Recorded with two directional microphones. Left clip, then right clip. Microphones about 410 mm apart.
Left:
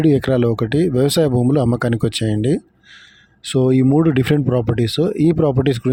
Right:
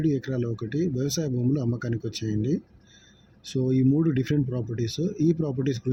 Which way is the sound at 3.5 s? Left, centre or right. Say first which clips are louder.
Left 10 dB; left.